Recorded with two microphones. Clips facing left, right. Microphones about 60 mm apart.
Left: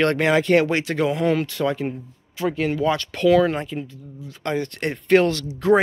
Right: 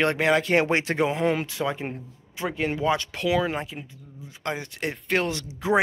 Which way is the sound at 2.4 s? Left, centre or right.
Right.